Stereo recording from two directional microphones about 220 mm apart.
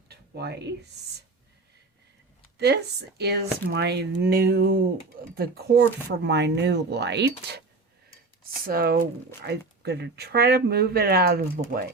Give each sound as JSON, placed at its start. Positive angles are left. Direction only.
{"t": 0.1, "sound": "a sound", "side_deg": -50}
{"t": 3.2, "sound": "speech", "side_deg": -50}
{"t": 8.6, "sound": "speech", "side_deg": -45}